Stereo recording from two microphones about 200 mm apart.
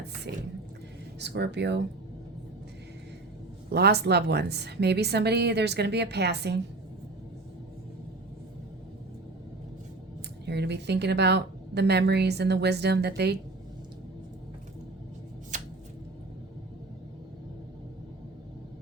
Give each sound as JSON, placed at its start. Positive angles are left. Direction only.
{"t": 1.2, "sound": "a woman's voice", "side_deg": -60}
{"t": 3.7, "sound": "a woman's voice", "side_deg": -55}
{"t": 10.4, "sound": "a woman's voice", "side_deg": -55}
{"t": 15.5, "sound": "a sound", "side_deg": -35}